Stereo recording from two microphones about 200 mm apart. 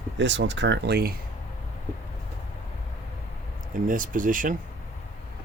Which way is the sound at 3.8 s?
40° right (ahead or behind).